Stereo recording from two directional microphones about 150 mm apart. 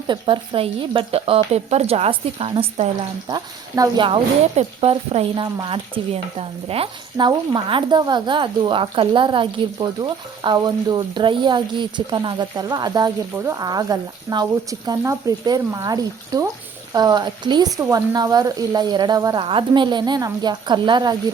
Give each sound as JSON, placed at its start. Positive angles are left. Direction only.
{"t": 0.1, "sound": "a woman's voice", "side_deg": -35}
{"t": 3.2, "sound": "a woman's voice", "side_deg": -25}